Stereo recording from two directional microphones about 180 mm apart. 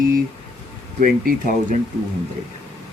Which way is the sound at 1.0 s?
50° right (ahead or behind).